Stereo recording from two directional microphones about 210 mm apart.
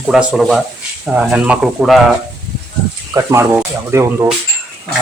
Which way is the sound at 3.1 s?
10° right (ahead or behind).